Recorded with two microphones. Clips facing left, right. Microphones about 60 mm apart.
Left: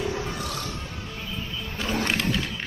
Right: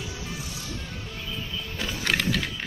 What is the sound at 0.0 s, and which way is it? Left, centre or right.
Music, left.